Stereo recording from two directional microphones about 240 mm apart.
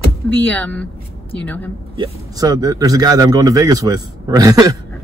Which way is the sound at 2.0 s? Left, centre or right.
Centre.